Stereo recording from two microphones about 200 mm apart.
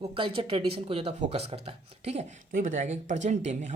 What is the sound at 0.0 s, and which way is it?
Speech, 25° right (ahead or behind).